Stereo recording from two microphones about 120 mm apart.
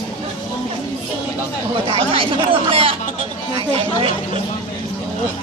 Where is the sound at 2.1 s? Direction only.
50° right (ahead or behind).